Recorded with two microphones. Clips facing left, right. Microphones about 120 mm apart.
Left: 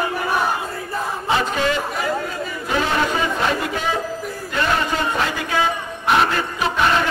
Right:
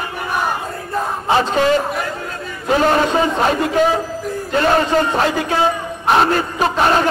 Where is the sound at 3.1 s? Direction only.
30° right (ahead or behind).